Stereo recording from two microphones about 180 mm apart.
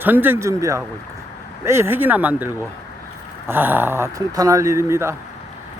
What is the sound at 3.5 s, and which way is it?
Speech, 10° right (ahead or behind).